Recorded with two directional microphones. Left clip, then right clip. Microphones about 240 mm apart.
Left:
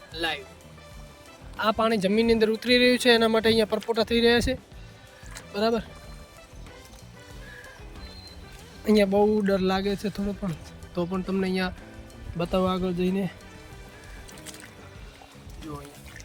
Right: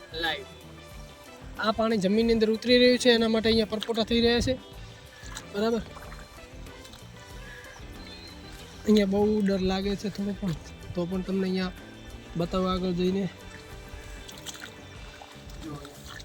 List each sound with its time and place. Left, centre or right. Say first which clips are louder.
0.1 s music: left 1 dB; centre
1.5 s speech: left 3 dB; centre
5.3 s music: left 3 dB; centre
8.8 s speech: left 3 dB; centre